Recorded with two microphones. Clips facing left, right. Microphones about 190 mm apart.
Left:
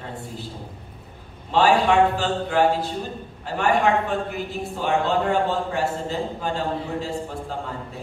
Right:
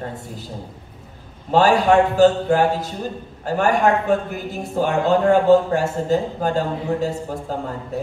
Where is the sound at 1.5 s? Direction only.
40° right (ahead or behind).